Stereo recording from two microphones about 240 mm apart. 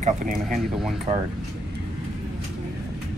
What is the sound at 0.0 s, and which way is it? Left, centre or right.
Speech, right.